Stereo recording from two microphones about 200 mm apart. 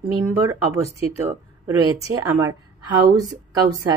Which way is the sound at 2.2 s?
15° right (ahead or behind).